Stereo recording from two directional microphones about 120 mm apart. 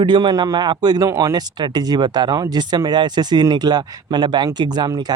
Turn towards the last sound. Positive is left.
turn(degrees=-35)  # may be behind; listen again after turning